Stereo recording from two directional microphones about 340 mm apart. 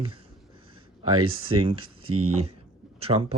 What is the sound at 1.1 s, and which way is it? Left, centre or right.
Speech, right.